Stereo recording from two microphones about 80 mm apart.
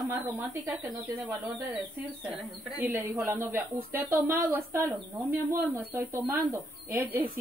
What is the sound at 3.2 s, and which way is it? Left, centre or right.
Speech, right.